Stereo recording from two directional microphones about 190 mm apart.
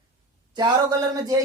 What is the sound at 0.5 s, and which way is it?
Speech, 20° right (ahead or behind).